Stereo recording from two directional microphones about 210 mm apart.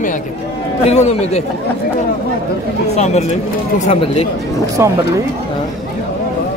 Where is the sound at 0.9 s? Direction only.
30° left (ahead or behind).